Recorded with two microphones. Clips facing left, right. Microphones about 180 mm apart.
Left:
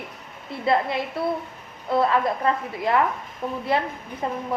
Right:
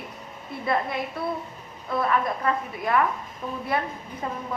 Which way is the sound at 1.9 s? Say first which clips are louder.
Left 4 dB; 30° left (ahead or behind).